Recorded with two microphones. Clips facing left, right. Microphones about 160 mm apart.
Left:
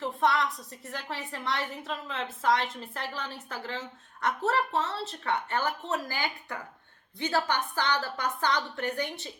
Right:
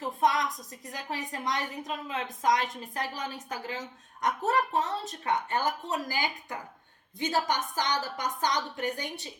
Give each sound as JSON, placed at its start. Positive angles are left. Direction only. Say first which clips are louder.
{"t": 0.0, "sound": "a woman's voice", "louder": "even", "side_deg": -15}